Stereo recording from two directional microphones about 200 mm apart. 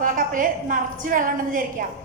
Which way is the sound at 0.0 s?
45° right (ahead or behind).